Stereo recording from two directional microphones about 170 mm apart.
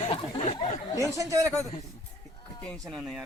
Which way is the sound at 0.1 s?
35° left (ahead or behind).